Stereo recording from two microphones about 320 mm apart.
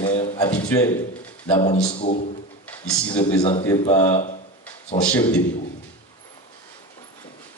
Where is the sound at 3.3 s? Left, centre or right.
Centre.